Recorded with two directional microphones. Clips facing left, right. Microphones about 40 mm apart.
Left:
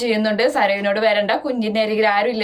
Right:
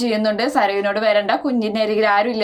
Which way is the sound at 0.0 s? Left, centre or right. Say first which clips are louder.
Left 1 dB; left.